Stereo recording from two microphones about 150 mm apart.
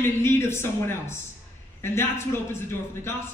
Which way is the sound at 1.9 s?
15° left (ahead or behind).